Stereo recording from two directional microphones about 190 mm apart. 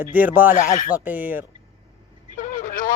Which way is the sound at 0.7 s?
45° left (ahead or behind).